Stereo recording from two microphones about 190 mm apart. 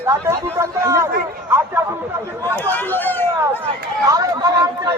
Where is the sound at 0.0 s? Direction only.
15° right (ahead or behind).